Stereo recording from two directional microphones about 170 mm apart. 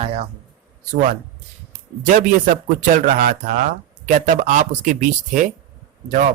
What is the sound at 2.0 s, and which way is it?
Speech, 55° right (ahead or behind).